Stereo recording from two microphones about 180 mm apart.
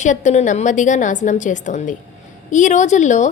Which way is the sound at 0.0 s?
40° left (ahead or behind).